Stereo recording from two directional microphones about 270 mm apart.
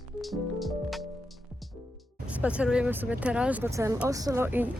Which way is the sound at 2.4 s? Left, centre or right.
Centre.